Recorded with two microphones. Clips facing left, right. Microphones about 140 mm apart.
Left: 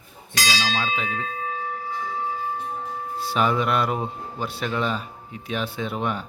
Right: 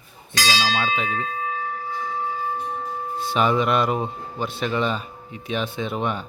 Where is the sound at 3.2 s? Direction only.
20° right (ahead or behind).